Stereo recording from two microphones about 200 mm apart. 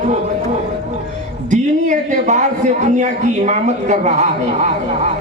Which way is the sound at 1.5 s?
40° right (ahead or behind).